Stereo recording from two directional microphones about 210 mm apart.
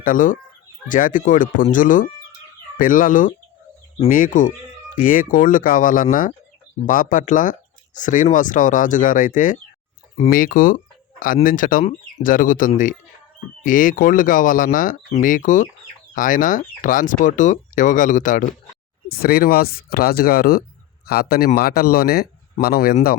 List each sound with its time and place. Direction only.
0.0 s speech: 40° left (ahead or behind)